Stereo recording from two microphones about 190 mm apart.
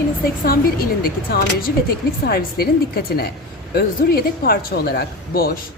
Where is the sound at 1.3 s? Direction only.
50° left (ahead or behind).